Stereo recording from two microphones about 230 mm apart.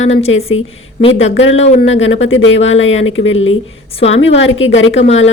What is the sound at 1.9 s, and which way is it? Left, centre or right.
Speech, left.